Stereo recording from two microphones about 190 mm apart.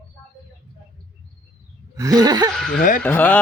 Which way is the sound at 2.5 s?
Centre (ahead or behind).